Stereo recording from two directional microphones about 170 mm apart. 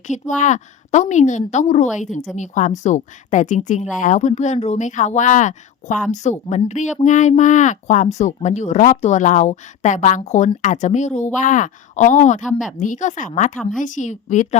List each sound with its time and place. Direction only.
0.1 s a woman's voice: 45° left (ahead or behind)